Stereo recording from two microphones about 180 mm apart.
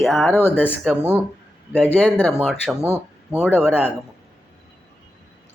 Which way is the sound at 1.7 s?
10° left (ahead or behind).